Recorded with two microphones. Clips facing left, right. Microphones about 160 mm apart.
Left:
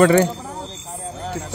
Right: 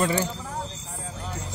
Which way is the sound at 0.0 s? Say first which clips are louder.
Left 11 dB; 70° left (ahead or behind).